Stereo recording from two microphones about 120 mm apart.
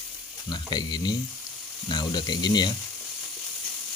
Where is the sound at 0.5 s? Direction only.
35° left (ahead or behind).